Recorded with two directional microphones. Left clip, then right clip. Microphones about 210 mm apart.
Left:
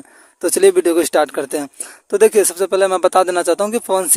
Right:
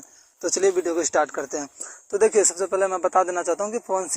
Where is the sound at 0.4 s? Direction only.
65° left (ahead or behind).